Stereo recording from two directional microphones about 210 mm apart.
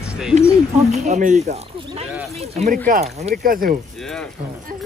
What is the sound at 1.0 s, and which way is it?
Speech, 35° right (ahead or behind).